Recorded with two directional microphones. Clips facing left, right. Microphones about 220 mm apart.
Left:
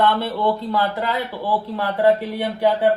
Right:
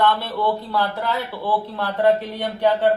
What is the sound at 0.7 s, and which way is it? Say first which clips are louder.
Speech: left 1 dB; 15° left (ahead or behind).